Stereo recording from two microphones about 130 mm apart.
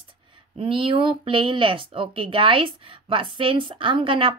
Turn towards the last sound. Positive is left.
turn(degrees=-40)  # may be behind; listen again after turning